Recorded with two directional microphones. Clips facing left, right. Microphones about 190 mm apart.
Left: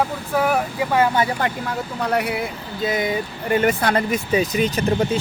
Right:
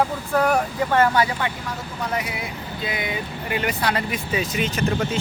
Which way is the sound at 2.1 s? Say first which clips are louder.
Left 7 dB; 60° left (ahead or behind).